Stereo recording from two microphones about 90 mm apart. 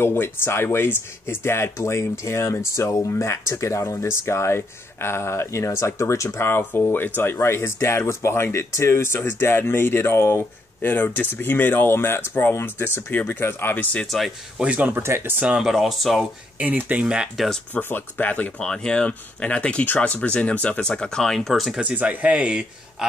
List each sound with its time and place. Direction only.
0.0 s speech: 25° left (ahead or behind)
13.9 s speech: centre (ahead or behind)
14.6 s a man's voice: 10° right (ahead or behind)
14.9 s speech: 25° right (ahead or behind)
15.4 s a man's voice: 5° right (ahead or behind)
16.5 s a man's voice: 20° right (ahead or behind)
17.7 s speech: 20° left (ahead or behind); by 21.7 s centre (ahead or behind)
21.9 s a man's voice: 15° right (ahead or behind)